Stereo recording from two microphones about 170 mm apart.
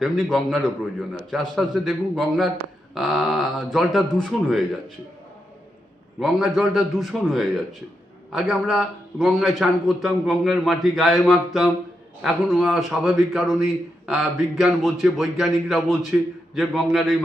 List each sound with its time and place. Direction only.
0.0 s a man's voice: centre (ahead or behind)
6.1 s a man's voice: centre (ahead or behind)